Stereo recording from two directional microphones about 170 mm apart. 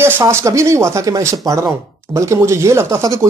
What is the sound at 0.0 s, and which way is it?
Speech, 15° right (ahead or behind).